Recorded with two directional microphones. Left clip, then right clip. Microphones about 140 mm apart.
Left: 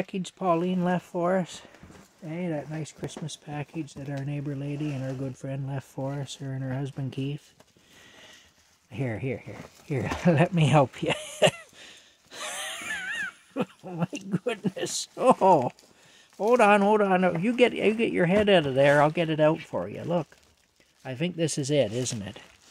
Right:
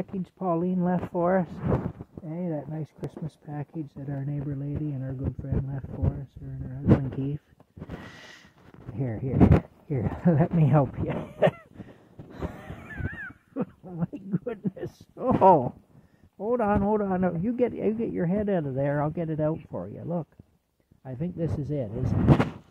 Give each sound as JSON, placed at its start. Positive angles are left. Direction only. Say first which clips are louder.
{"t": 0.0, "sound": "speech", "louder": "left 3 dB", "side_deg": 10}
{"t": 2.8, "sound": "speech", "louder": "left 1 dB", "side_deg": 5}
{"t": 3.4, "sound": "a man's voice", "louder": "left 1 dB", "side_deg": 25}
{"t": 6.4, "sound": "speech", "louder": "left 8 dB", "side_deg": 35}
{"t": 8.9, "sound": "a man's voice", "louder": "left 2 dB", "side_deg": 30}
{"t": 9.8, "sound": "a sound", "louder": "left 7 dB", "side_deg": 30}
{"t": 15.1, "sound": "a man's voice", "louder": "right 1 dB", "side_deg": 20}
{"t": 19.7, "sound": "speech", "louder": "left 5 dB", "side_deg": 35}
{"t": 21.0, "sound": "a man's voice", "louder": "left 4 dB", "side_deg": 25}